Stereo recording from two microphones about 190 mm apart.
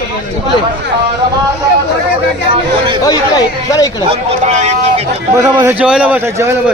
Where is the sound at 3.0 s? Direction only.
20° left (ahead or behind).